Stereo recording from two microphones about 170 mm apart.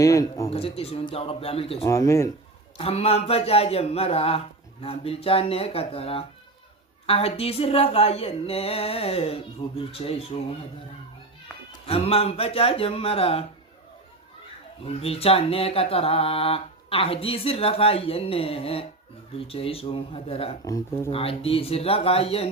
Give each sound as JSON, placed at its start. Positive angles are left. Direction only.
{"t": 0.0, "sound": "speech", "side_deg": 20}
{"t": 0.5, "sound": "speech", "side_deg": 35}
{"t": 1.8, "sound": "speech", "side_deg": 15}
{"t": 2.7, "sound": "speech", "side_deg": 35}
{"t": 11.9, "sound": "speech", "side_deg": 35}
{"t": 14.8, "sound": "speech", "side_deg": 35}
{"t": 20.7, "sound": "speech", "side_deg": 15}
{"t": 21.1, "sound": "speech", "side_deg": 35}